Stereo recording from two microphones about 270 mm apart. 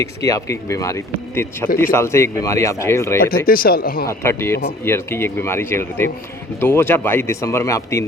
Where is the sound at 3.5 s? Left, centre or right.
Left.